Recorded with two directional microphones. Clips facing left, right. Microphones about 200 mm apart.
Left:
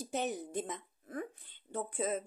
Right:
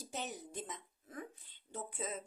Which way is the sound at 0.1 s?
55° left (ahead or behind).